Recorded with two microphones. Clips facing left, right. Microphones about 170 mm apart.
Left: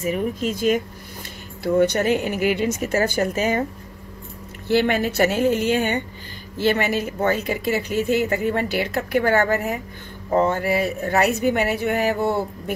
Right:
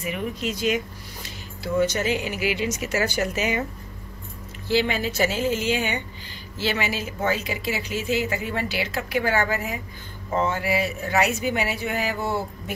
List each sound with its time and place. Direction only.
0.0 s speech: 40° left (ahead or behind)
4.6 s speech: 55° left (ahead or behind)